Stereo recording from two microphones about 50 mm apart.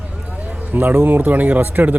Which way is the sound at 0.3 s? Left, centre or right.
Right.